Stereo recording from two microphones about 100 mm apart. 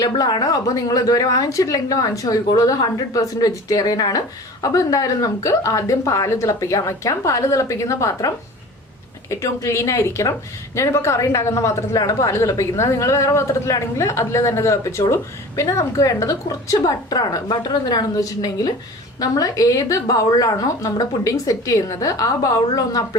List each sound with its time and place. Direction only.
0.0 s a woman's voice: 45° left (ahead or behind)
9.3 s a woman's voice: 30° left (ahead or behind)